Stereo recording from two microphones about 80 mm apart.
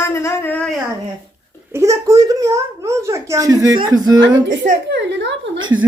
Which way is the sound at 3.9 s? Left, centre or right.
Right.